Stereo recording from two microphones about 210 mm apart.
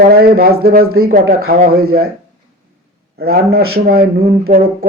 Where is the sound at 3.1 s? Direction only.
50° right (ahead or behind).